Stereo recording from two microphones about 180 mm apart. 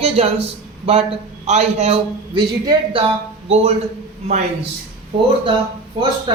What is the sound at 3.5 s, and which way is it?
Speech, 35° right (ahead or behind).